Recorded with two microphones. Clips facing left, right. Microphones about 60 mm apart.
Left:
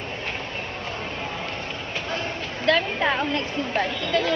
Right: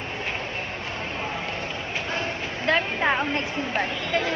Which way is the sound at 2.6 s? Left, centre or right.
Right.